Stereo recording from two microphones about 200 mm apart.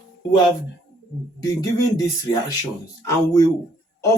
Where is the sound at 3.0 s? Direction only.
15° left (ahead or behind).